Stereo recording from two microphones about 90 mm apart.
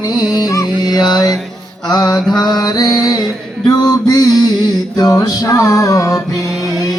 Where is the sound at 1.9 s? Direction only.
45° left (ahead or behind).